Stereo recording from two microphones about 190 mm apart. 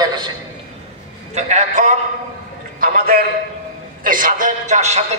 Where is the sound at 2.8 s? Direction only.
50° right (ahead or behind).